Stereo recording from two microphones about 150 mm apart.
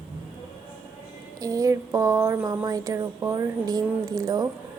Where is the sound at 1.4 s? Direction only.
20° right (ahead or behind).